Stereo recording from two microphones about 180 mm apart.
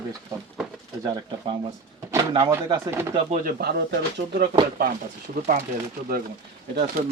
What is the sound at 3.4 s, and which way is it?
Speech, 60° right (ahead or behind).